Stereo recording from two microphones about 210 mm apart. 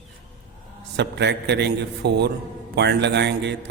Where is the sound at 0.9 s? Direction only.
55° right (ahead or behind).